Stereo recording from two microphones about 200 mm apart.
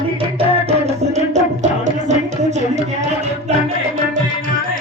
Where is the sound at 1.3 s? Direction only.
35° right (ahead or behind).